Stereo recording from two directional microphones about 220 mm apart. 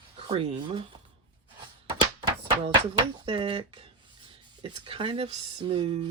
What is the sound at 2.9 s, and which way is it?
Speech, 20° right (ahead or behind).